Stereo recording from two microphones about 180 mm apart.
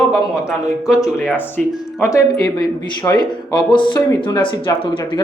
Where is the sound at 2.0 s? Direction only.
15° left (ahead or behind).